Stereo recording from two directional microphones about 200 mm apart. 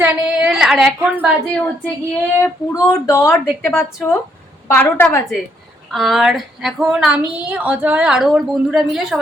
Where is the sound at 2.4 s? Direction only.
15° left (ahead or behind).